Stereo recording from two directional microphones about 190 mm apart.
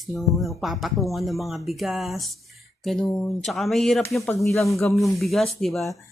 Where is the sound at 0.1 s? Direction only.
Centre (ahead or behind).